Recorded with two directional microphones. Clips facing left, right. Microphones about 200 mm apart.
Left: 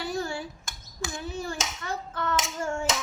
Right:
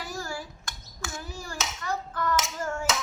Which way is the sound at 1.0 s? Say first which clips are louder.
Left 5 dB; 20° left (ahead or behind).